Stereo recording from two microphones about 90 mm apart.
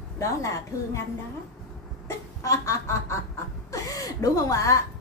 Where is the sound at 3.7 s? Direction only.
40° left (ahead or behind).